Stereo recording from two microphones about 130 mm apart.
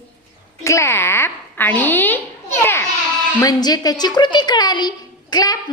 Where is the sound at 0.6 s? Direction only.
20° left (ahead or behind).